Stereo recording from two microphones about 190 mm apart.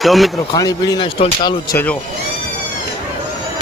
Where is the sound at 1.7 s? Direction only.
10° left (ahead or behind).